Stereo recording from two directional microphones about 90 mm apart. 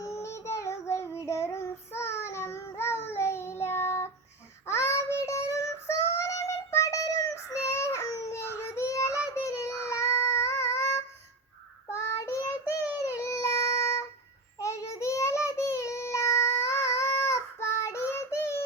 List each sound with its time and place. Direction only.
0.0 s child singing: 35° left (ahead or behind)
13.0 s a sound: 30° left (ahead or behind)
14.6 s child singing: 35° left (ahead or behind)